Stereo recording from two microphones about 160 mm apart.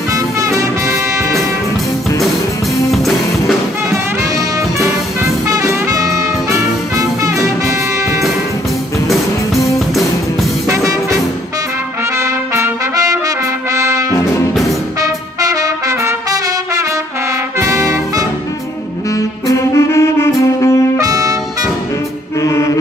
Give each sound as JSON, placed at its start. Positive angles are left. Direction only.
{"t": 0.1, "sound": "music", "side_deg": -20}
{"t": 4.7, "sound": "music", "side_deg": -20}
{"t": 10.7, "sound": "music", "side_deg": -20}
{"t": 12.2, "sound": "trumpet", "side_deg": -20}
{"t": 13.7, "sound": "brass instrument", "side_deg": -20}
{"t": 15.0, "sound": "trumpet", "side_deg": -20}
{"t": 17.6, "sound": "brass instrument", "side_deg": -20}
{"t": 19.1, "sound": "saxophone", "side_deg": 20}
{"t": 21.0, "sound": "music", "side_deg": -20}
{"t": 22.4, "sound": "music", "side_deg": 15}